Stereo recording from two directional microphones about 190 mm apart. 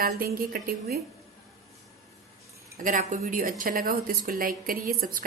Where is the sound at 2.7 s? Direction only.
45° right (ahead or behind).